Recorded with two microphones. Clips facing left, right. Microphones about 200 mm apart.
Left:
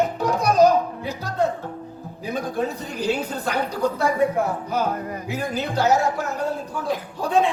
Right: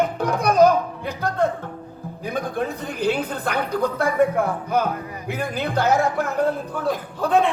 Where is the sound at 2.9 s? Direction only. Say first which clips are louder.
Right 2 dB; 55° right (ahead or behind).